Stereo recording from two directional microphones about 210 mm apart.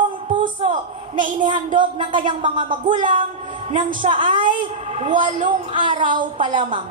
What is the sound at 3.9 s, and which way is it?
A woman's voice, 25° right (ahead or behind).